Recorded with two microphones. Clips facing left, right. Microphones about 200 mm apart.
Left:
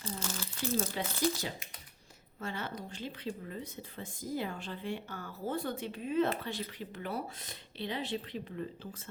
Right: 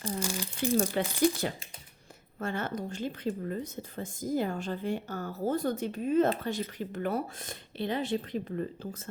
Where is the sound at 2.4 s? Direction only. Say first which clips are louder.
Right 6 dB; 50° right (ahead or behind).